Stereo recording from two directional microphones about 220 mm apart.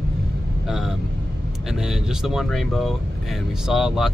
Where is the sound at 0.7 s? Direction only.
Centre (ahead or behind).